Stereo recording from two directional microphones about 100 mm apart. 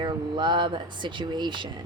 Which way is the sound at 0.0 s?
55° right (ahead or behind).